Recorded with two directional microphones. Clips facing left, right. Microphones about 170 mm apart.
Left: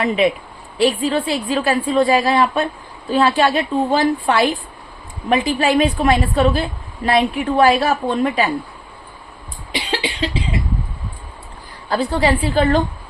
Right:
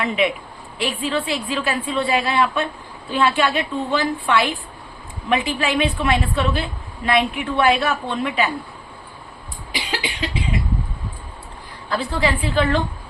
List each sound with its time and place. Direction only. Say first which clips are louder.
0.0 s a woman's voice: left 4 dB; 35° left (ahead or behind)
9.9 s cough: left 4 dB; 30° left (ahead or behind)
11.9 s a woman's voice: left 4 dB; 35° left (ahead or behind)